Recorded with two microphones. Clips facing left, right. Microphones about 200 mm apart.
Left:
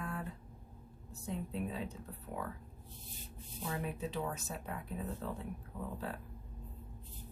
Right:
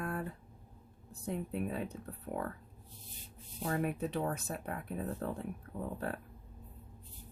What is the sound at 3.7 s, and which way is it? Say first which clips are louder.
Speech: right 5 dB; 55° right (ahead or behind).